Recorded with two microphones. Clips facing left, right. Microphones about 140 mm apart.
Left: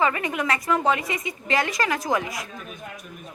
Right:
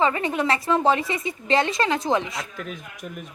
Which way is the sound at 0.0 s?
30° right (ahead or behind).